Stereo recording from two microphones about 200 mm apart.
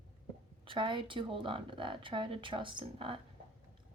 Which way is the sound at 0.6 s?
25° right (ahead or behind).